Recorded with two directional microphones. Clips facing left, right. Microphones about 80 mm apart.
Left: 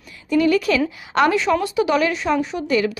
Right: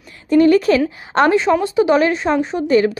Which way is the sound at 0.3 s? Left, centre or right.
Right.